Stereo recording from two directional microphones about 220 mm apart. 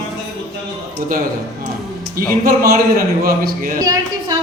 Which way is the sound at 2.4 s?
45° right (ahead or behind).